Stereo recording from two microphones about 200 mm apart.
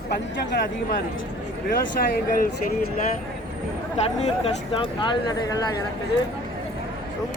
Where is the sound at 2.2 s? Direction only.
45° left (ahead or behind).